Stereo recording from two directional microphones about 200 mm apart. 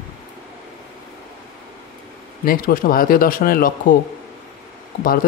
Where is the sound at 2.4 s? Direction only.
45° left (ahead or behind).